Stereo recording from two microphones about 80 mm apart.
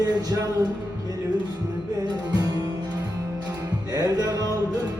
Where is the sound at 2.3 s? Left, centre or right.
Right.